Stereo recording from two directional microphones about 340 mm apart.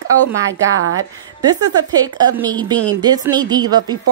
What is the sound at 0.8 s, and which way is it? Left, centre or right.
Speech, right.